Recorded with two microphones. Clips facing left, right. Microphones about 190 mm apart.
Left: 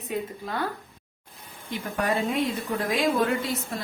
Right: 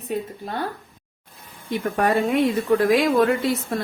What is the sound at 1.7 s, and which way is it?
Speech, 60° right (ahead or behind).